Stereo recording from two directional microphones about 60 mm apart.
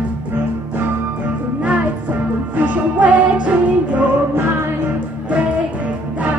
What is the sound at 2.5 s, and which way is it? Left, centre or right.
Music, right.